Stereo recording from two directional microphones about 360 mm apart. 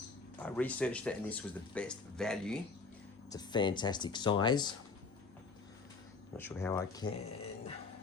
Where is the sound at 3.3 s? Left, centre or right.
Centre.